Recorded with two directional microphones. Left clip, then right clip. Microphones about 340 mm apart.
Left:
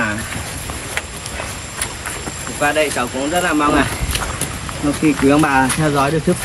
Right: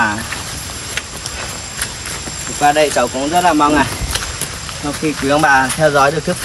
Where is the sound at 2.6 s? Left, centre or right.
Centre.